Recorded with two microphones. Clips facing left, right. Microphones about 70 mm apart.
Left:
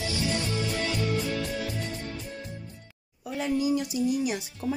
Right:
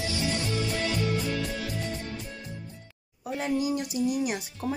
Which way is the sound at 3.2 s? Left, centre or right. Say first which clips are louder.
Left 1 dB; right.